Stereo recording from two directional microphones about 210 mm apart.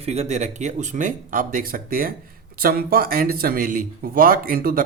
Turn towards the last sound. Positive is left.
turn(degrees=-45)  # may be behind; listen again after turning